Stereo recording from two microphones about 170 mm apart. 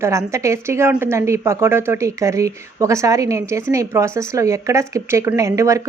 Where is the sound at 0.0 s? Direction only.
15° right (ahead or behind).